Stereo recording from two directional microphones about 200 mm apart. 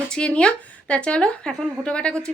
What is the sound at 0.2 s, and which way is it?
A woman's voice, 5° left (ahead or behind).